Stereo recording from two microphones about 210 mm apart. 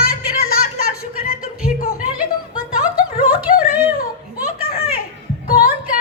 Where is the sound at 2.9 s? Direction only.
45° left (ahead or behind).